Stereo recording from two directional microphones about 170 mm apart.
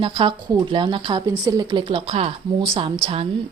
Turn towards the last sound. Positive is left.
turn(degrees=-30)  # may be behind; listen again after turning